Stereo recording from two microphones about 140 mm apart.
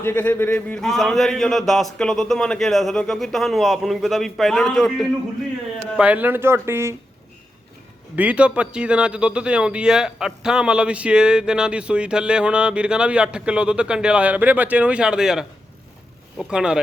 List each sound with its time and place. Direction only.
0.0 s a man's voice: 15° left (ahead or behind)
6.0 s a man's voice: 10° right (ahead or behind)
8.1 s a man's voice: 10° right (ahead or behind)